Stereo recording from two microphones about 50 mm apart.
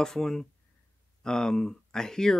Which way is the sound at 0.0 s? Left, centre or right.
Centre.